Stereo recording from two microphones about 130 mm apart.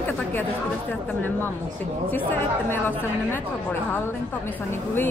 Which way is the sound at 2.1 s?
15° left (ahead or behind).